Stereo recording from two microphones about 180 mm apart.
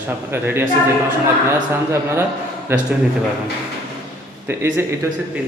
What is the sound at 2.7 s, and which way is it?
Speech, 10° right (ahead or behind).